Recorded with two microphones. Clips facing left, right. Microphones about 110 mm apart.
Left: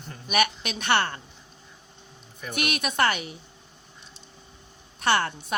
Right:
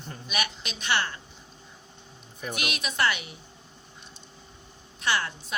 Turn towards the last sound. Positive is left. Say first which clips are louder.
# left 5 dB
turn(degrees=60)  # may be behind; listen again after turning